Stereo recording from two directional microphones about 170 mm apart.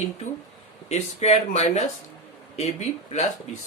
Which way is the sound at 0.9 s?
40° left (ahead or behind).